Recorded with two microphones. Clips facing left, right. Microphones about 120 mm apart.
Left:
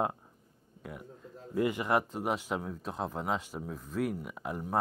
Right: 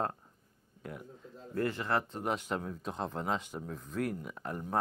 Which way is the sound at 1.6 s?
15° left (ahead or behind).